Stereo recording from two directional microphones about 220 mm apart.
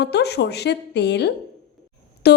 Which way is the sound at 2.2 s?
50° left (ahead or behind).